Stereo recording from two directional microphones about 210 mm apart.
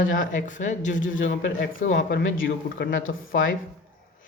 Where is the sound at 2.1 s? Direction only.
65° left (ahead or behind).